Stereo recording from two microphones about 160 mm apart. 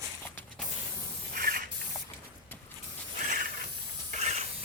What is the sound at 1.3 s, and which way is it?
Spray, 65° right (ahead or behind).